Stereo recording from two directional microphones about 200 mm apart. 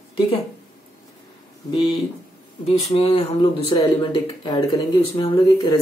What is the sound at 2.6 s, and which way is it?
Speech, 30° left (ahead or behind).